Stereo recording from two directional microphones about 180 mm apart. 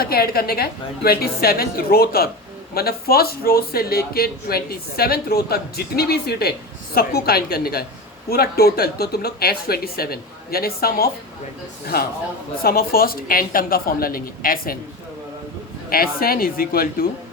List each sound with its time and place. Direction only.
0.0 s speech: 60° left (ahead or behind)
12.6 s speech: 55° left (ahead or behind)
15.9 s speech: 55° left (ahead or behind)